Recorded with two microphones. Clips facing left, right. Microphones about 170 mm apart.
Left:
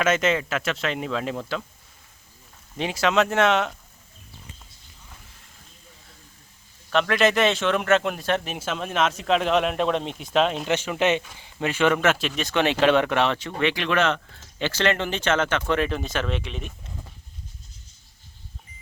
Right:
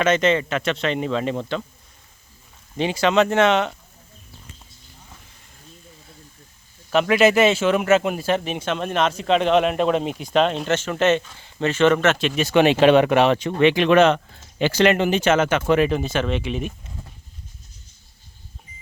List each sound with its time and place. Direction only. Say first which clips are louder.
0.0 s speech: right 3 dB; 5° left (ahead or behind)
2.7 s speech: right 4 dB; centre (ahead or behind)
6.9 s speech: right 4 dB; 5° right (ahead or behind)
10.7 s speech: right 3 dB; 10° left (ahead or behind)
12.3 s speech: right 7 dB; 10° right (ahead or behind)